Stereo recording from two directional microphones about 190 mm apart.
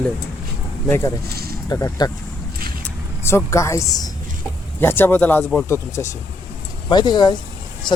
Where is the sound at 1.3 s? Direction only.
55° right (ahead or behind).